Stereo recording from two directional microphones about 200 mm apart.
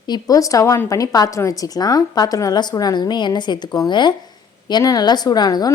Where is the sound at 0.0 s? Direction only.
20° left (ahead or behind).